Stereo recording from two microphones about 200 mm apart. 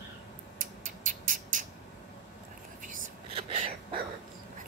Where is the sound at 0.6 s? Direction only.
40° right (ahead or behind).